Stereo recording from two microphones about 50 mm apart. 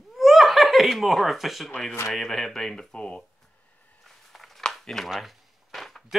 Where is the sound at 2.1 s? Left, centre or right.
Centre.